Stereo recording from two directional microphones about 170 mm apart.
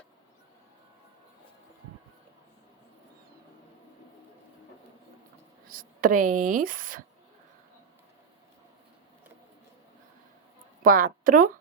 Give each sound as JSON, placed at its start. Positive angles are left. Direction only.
{"t": 5.6, "sound": "speech", "side_deg": -55}
{"t": 10.8, "sound": "a woman's voice", "side_deg": -55}